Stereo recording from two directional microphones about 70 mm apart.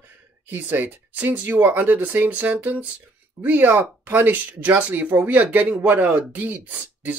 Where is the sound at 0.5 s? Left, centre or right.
Right.